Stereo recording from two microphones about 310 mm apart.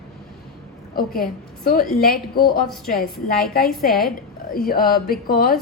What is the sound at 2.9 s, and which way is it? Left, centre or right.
A woman's voice, left.